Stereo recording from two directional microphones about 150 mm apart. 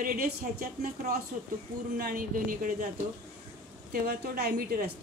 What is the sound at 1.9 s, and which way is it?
Speech, 80° right.